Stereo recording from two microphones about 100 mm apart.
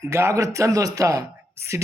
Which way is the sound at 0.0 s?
30° right (ahead or behind).